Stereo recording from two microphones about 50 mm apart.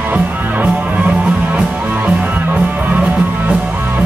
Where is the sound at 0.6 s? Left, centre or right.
Right.